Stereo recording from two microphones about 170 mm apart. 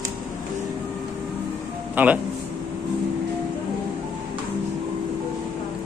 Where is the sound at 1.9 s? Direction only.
10° right (ahead or behind).